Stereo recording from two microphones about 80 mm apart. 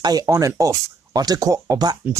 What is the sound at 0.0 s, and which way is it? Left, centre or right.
Speech, right.